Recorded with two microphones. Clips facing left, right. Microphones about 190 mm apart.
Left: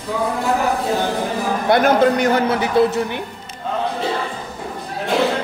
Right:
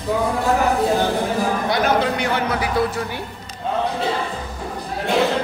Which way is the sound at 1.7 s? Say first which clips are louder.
Left 8 dB; 45° left (ahead or behind).